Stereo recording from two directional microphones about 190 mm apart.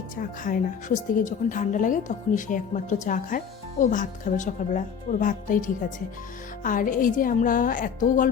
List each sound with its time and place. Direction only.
0.2 s speech: 45° left (ahead or behind)